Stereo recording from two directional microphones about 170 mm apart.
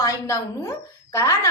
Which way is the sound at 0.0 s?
20° left (ahead or behind).